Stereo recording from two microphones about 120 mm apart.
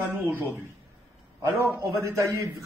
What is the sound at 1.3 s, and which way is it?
A man's voice, 20° right (ahead or behind).